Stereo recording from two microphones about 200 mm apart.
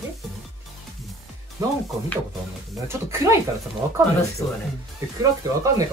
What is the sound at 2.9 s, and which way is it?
Speech, 15° right (ahead or behind).